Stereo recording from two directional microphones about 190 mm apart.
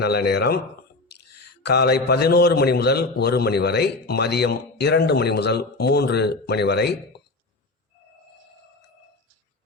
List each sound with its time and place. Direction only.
0.0 s a man's voice: 60° left (ahead or behind)
1.6 s a man's voice: 60° left (ahead or behind)